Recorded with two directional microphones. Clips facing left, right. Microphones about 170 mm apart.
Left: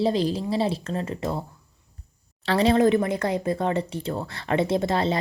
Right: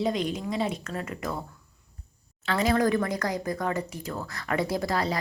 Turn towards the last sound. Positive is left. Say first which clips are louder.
# left 4 dB
turn(degrees=25)  # may be behind; listen again after turning